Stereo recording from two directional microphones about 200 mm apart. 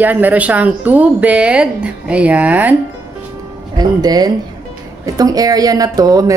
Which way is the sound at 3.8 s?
20° right (ahead or behind).